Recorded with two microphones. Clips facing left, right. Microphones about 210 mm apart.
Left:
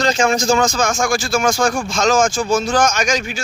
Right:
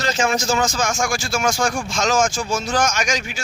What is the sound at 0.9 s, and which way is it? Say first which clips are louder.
Speech: left 4 dB; 50° left (ahead or behind).